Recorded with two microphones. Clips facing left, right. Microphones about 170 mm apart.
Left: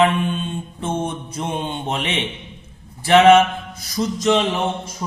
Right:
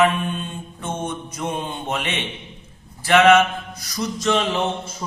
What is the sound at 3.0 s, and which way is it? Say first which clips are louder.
Mantra: left 3 dB; 25° left (ahead or behind).